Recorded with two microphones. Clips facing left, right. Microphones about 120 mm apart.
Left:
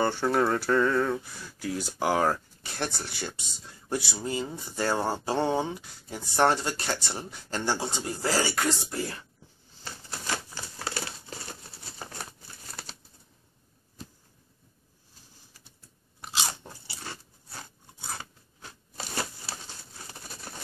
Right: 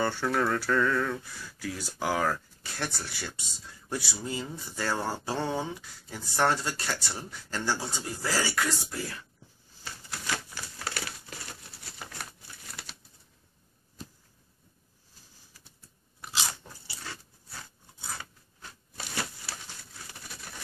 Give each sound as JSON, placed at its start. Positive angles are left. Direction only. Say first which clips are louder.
{"t": 0.0, "sound": "speech", "louder": "left 3 dB", "side_deg": 25}
{"t": 10.2, "sound": "crumpling", "louder": "left 1 dB", "side_deg": 30}
{"t": 16.6, "sound": "a sound", "louder": "left 2 dB", "side_deg": 25}